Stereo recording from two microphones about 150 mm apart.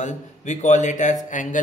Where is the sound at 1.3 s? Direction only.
55° left (ahead or behind).